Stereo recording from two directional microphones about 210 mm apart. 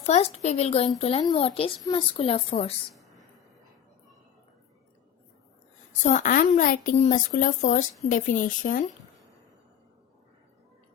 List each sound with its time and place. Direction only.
0.0 s speech: 30° left (ahead or behind)
2.9 s a sound: centre (ahead or behind)
6.0 s a woman's voice: 35° left (ahead or behind)